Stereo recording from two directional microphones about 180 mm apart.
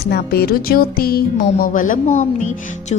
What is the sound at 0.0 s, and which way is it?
Speech, 60° left (ahead or behind).